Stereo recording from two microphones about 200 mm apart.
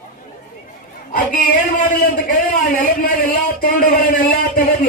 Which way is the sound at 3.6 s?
45° left (ahead or behind).